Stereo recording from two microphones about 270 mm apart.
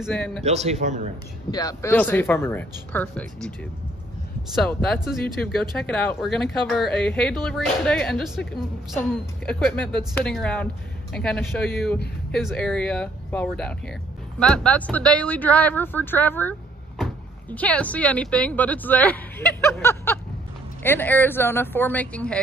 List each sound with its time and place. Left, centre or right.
0.0 s speech: centre
0.4 s speech: right
1.5 s speech: centre
4.6 s speech: centre